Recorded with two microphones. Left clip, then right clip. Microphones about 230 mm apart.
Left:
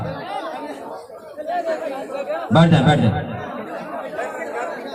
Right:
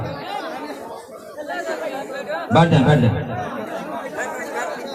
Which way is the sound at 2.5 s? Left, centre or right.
Left.